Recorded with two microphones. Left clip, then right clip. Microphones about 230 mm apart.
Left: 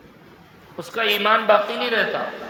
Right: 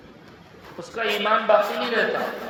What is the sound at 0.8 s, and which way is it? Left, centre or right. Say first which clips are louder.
A man's voice: left 4 dB; left.